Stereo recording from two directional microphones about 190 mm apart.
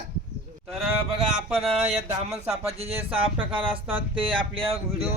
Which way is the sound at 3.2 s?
25° right (ahead or behind).